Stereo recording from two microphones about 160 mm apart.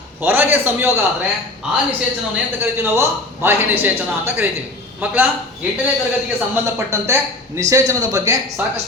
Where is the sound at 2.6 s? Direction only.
15° right (ahead or behind).